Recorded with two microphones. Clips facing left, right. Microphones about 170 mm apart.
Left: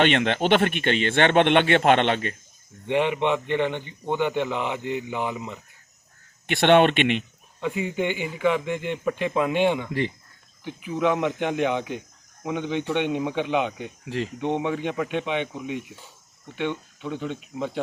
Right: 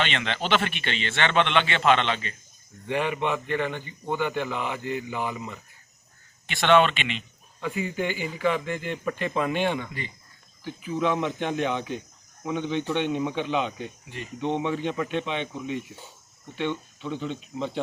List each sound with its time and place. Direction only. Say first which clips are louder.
0.0 s a man's voice: left 7 dB; 55° left (ahead or behind)
2.8 s a man's voice: left 4 dB; 20° left (ahead or behind)
6.5 s speech: left 3 dB; 60° left (ahead or behind)
7.6 s a man's voice: left 3 dB; 20° left (ahead or behind)
14.0 s speech: left 10 dB; 90° left
14.3 s speech: right 1 dB; 15° left (ahead or behind)